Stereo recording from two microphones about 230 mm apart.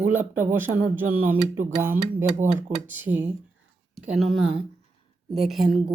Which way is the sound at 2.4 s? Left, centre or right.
Right.